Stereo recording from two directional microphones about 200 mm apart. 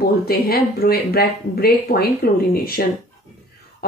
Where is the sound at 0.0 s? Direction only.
50° left (ahead or behind).